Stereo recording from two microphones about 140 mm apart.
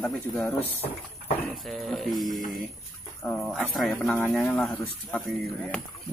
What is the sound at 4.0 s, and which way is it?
Speech, 15° left (ahead or behind).